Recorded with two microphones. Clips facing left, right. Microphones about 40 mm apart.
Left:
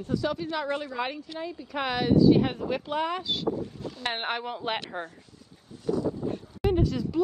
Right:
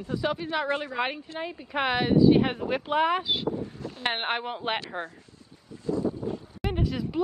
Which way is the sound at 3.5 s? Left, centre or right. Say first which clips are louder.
Even; right.